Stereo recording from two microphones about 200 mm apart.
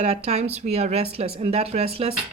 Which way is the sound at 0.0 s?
30° right (ahead or behind).